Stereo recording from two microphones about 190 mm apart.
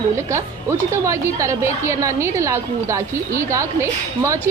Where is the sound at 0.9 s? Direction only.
15° right (ahead or behind).